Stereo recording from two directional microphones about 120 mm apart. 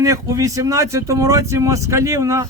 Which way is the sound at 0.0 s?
25° right (ahead or behind).